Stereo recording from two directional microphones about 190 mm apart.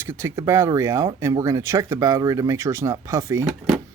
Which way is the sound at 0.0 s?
10° right (ahead or behind).